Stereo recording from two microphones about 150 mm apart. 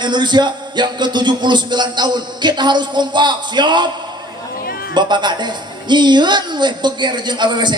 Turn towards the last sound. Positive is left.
turn(degrees=-30)  # may be behind; listen again after turning